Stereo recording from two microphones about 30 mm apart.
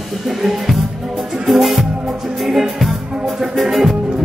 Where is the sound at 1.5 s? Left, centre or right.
Centre.